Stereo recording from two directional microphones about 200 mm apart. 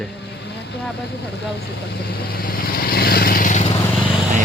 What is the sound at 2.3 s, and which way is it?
Vehicle, 45° left (ahead or behind).